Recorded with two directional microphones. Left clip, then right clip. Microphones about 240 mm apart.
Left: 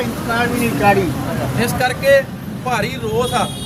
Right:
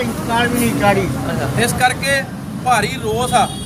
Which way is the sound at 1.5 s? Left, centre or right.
Centre.